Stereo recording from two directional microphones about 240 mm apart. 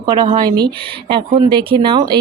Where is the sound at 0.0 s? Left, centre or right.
Centre.